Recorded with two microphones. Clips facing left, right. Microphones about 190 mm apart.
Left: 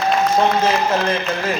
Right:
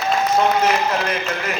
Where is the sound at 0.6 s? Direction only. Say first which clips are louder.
Left 1 dB; 30° left (ahead or behind).